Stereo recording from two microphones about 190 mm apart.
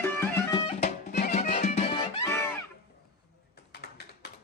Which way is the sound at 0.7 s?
35° left (ahead or behind).